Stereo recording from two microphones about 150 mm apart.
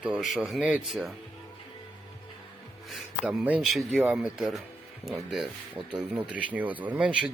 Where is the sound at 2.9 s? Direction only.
5° right (ahead or behind).